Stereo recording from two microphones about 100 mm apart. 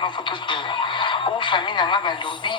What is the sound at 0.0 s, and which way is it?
Speech, 55° left (ahead or behind).